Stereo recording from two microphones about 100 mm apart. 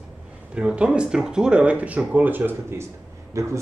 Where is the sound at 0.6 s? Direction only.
10° right (ahead or behind).